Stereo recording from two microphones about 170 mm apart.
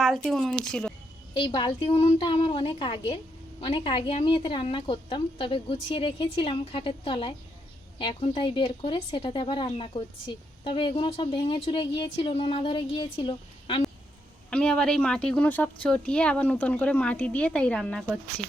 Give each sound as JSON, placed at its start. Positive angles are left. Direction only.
{"t": 0.0, "sound": "speech", "side_deg": 0}
{"t": 1.3, "sound": "speech", "side_deg": 30}
{"t": 14.5, "sound": "a woman's voice", "side_deg": 5}